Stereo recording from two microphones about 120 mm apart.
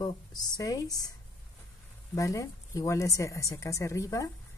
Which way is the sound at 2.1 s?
25° left (ahead or behind).